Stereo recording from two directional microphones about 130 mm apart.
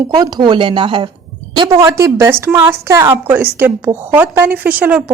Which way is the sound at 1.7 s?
25° right (ahead or behind).